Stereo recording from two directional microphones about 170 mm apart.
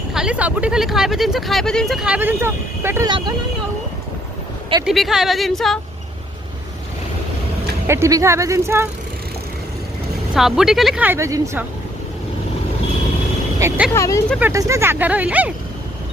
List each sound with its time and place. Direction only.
0.1 s speech: 5° right (ahead or behind)
3.1 s speech: 25° right (ahead or behind)
4.9 s speech: centre (ahead or behind)
7.9 s speech: 15° right (ahead or behind)
10.3 s speech: centre (ahead or behind)
13.6 s speech: 15° right (ahead or behind)
13.9 s speech: 20° left (ahead or behind)
14.3 s speech: 15° right (ahead or behind)